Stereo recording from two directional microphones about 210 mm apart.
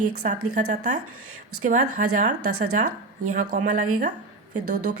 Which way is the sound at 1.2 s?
90° right.